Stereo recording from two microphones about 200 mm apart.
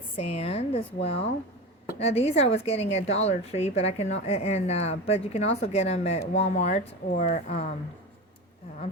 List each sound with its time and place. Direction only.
0.2 s a woman's voice: 30° left (ahead or behind)